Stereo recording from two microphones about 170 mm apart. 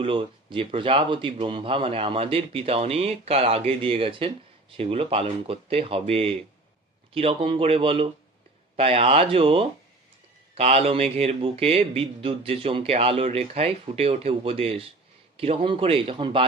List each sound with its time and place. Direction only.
0.0 s a man's voice: 30° right (ahead or behind)